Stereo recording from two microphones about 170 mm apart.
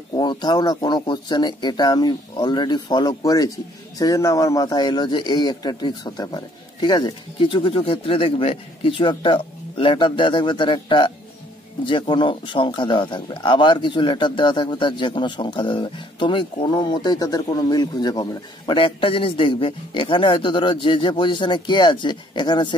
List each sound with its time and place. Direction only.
0.1 s speech: 25° left (ahead or behind)